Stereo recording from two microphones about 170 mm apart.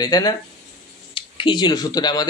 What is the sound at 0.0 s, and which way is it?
Speech, 20° left (ahead or behind).